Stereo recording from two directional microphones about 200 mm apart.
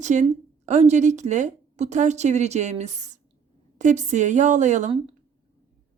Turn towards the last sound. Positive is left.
turn(degrees=-30)  # may be behind; listen again after turning